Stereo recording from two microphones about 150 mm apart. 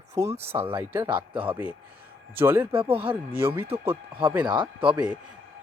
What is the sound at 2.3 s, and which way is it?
Speech, 15° right (ahead or behind).